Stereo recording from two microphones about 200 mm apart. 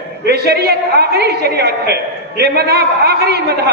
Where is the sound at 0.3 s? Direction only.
50° right (ahead or behind).